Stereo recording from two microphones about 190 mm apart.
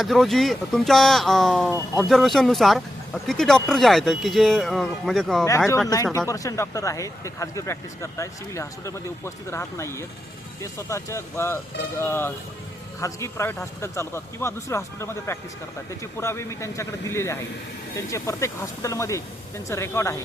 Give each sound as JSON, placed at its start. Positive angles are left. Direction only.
{"t": 0.0, "sound": "speech", "side_deg": 0}
{"t": 5.5, "sound": "speech", "side_deg": 15}